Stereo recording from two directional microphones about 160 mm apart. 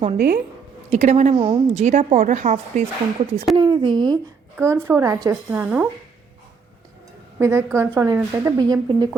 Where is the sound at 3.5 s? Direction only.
30° right (ahead or behind).